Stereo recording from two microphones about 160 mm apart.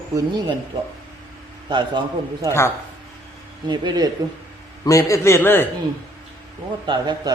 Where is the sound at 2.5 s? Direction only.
15° left (ahead or behind).